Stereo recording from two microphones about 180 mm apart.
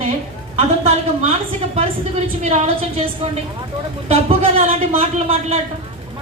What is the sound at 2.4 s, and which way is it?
Speech, 35° right (ahead or behind).